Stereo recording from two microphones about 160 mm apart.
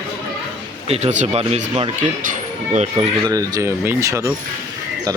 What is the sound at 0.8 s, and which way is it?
Speech, 40° right (ahead or behind).